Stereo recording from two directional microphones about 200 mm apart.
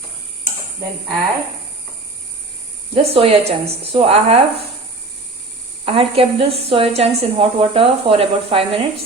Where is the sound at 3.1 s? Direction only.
30° right (ahead or behind).